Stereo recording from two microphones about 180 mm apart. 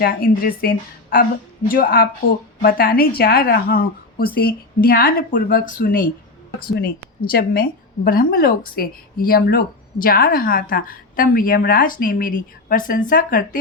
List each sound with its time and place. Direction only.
0.0 s a woman's voice: 55° left (ahead or behind)